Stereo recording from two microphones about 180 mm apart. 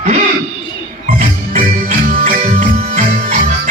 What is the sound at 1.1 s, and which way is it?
Music, 45° right (ahead or behind).